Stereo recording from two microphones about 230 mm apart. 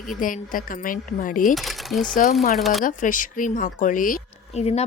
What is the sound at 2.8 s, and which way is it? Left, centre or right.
Speech, left.